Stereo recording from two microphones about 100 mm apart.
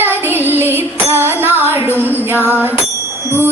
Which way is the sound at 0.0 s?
20° right (ahead or behind).